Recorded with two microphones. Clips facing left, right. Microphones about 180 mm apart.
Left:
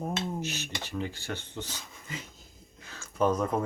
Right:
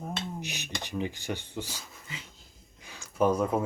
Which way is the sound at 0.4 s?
15° right (ahead or behind).